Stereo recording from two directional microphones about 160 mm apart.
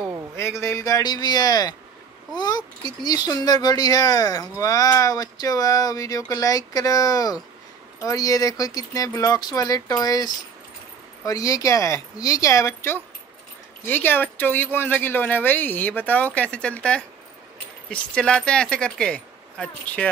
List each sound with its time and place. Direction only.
0.4 s speech: 15° left (ahead or behind)